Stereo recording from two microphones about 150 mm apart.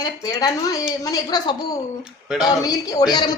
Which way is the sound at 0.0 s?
25° left (ahead or behind).